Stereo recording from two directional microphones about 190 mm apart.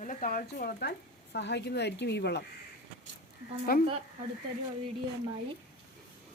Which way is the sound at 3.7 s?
50° left (ahead or behind).